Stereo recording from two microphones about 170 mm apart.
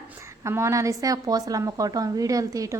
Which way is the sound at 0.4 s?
15° right (ahead or behind).